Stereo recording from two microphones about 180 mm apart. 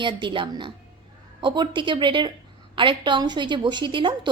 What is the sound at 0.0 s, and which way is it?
A woman's voice, 25° right (ahead or behind).